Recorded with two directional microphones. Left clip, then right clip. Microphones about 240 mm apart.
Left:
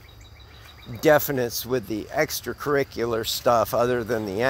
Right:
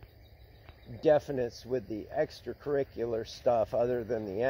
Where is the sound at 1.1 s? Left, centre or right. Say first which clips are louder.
Left 7 dB; left.